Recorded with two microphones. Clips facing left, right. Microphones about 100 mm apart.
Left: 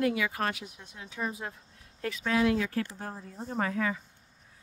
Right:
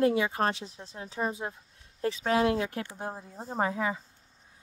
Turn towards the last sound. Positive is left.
turn(degrees=-20)  # may be behind; listen again after turning